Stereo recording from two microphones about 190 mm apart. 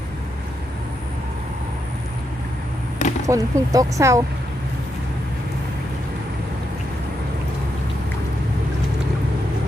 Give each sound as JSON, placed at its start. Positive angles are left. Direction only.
{"t": 3.2, "sound": "speech", "side_deg": -15}